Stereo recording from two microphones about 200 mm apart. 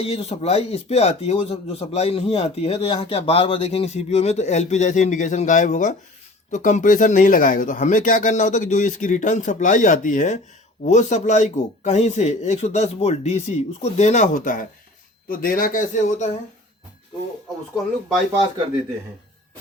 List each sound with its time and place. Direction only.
0.0 s a man's voice: 30° left (ahead or behind)